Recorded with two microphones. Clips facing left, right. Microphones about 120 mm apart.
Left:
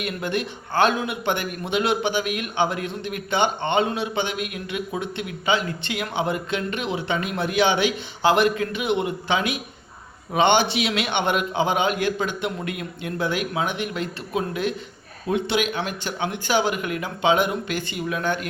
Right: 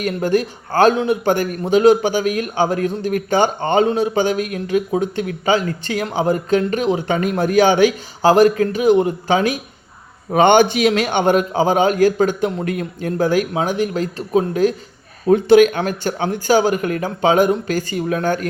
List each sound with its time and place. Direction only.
0.0 s a man's voice: 40° right (ahead or behind)